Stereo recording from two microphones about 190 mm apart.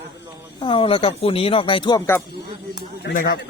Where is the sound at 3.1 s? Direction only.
65° left (ahead or behind).